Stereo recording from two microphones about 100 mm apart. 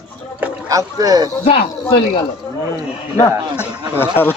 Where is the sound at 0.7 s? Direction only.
35° right (ahead or behind).